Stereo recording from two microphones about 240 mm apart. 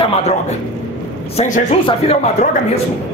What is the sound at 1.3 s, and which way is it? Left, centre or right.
Speech, left.